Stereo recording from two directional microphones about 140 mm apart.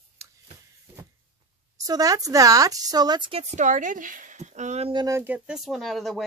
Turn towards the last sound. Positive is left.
turn(degrees=0)  # may be behind; listen again after turning